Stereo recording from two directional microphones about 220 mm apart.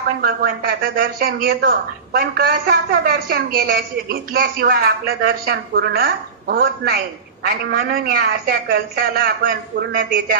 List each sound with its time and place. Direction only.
0.2 s speech: 45° right (ahead or behind)